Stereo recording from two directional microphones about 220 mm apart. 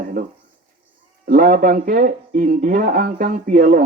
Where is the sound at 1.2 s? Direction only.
40° right (ahead or behind).